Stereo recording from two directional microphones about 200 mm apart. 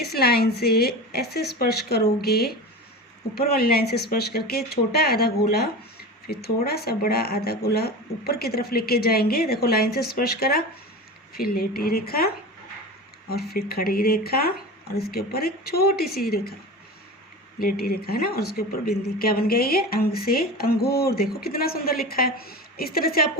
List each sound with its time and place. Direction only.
0.0 s speech: 50° left (ahead or behind)
17.6 s speech: 45° left (ahead or behind)